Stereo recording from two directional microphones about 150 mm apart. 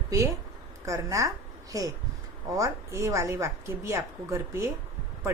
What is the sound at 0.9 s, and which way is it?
Speech, 20° right (ahead or behind).